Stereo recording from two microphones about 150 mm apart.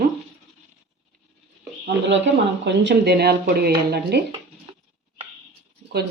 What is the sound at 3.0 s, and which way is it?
Speech, 90° right.